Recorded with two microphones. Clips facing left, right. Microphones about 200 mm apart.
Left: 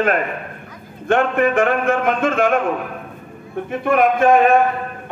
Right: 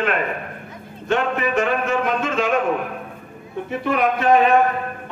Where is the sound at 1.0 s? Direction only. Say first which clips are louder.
Left 5 dB; 55° left (ahead or behind).